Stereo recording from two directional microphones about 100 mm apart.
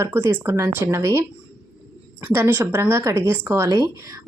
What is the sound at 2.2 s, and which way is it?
Speech, 25° right (ahead or behind).